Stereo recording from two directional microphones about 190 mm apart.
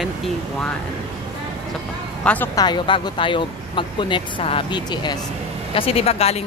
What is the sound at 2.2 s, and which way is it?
Speech, 10° left (ahead or behind).